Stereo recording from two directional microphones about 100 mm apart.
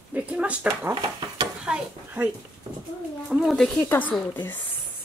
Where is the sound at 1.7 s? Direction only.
10° right (ahead or behind).